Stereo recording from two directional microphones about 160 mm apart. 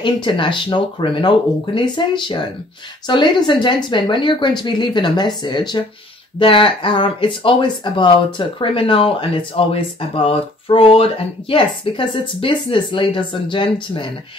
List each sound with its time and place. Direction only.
0.0 s speech: 30° left (ahead or behind)